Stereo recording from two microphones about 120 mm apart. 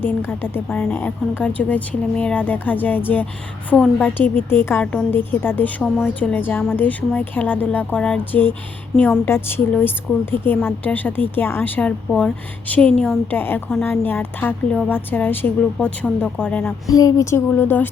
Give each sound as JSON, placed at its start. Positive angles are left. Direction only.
{"t": 0.0, "sound": "a woman's voice", "side_deg": 15}
{"t": 16.9, "sound": "speech", "side_deg": 30}